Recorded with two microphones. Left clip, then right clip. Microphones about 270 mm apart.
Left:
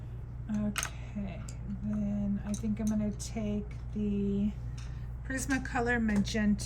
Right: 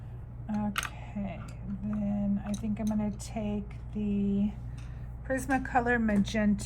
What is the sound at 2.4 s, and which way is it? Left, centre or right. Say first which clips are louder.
A woman's voice: right 1 dB; right.